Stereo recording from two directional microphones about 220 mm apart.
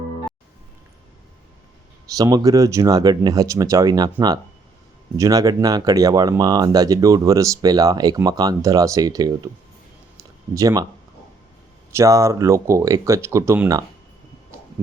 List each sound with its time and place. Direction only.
2.1 s speech: 15° right (ahead or behind)
5.1 s speech: 15° right (ahead or behind)
10.5 s speech: 15° right (ahead or behind)
11.9 s speech: 15° right (ahead or behind)